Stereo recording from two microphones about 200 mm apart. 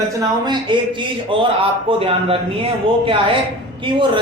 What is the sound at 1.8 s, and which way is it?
Speech, 30° right (ahead or behind).